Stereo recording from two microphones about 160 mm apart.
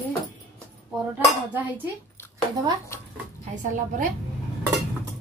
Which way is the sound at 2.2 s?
15° left (ahead or behind).